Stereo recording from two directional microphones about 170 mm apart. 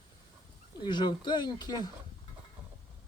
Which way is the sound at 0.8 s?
25° left (ahead or behind).